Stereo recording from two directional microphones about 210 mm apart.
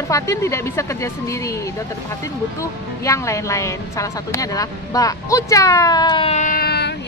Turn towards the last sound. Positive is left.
turn(degrees=50)  # may be behind; listen again after turning